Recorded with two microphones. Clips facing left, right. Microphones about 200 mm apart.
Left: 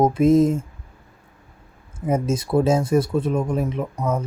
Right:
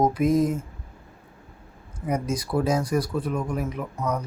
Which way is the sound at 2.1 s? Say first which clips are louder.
Left 5 dB; 25° left (ahead or behind).